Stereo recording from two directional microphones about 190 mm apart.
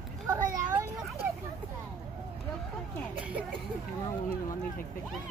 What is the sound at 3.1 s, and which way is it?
Speech, 5° right (ahead or behind).